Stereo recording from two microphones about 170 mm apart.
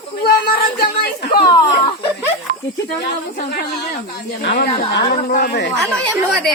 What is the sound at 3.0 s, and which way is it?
A woman's voice, 65° left (ahead or behind).